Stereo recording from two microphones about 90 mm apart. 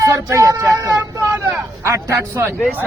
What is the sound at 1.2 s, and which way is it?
Speech, 25° right (ahead or behind).